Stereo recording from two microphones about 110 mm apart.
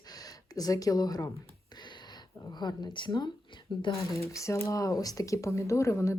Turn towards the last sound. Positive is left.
turn(degrees=25)  # may be behind; listen again after turning